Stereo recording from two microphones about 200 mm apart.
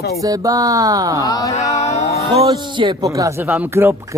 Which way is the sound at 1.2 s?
15° left (ahead or behind).